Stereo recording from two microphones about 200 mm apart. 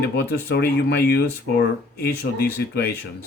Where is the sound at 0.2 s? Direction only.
55° left (ahead or behind).